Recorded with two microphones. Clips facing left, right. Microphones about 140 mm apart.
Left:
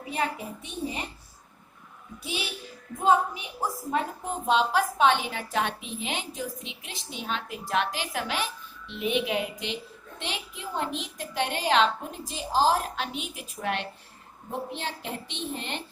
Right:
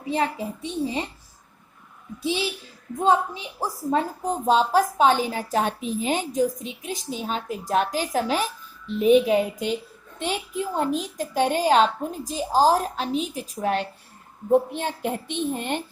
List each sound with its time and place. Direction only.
0.1 s a child's voice: 30° right (ahead or behind)
3.0 s a woman's voice: 30° right (ahead or behind)
14.7 s a woman's voice: 50° right (ahead or behind)